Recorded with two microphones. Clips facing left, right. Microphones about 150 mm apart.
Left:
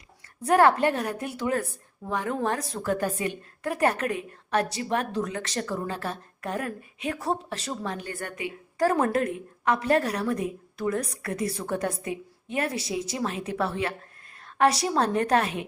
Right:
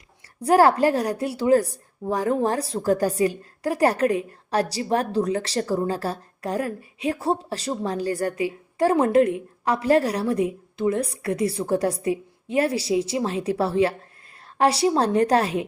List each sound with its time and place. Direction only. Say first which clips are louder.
0.4 s a woman's voice: right 3 dB; 30° right (ahead or behind)